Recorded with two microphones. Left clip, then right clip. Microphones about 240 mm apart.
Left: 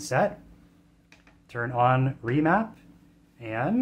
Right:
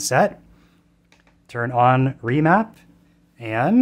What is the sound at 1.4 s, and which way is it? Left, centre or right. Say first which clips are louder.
Speech: right 6 dB; right.